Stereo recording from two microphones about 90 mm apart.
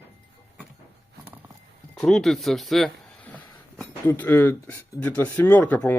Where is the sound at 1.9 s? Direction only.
5° left (ahead or behind).